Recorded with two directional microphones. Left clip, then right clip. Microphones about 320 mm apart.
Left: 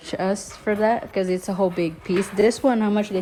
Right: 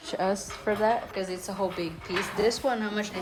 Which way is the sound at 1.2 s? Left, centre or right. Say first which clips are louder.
Left 8 dB; centre.